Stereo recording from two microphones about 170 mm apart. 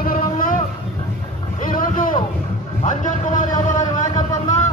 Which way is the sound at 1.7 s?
55° left (ahead or behind).